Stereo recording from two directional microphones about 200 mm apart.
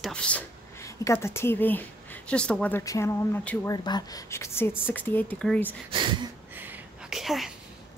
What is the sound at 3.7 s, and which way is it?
Speech, 20° left (ahead or behind).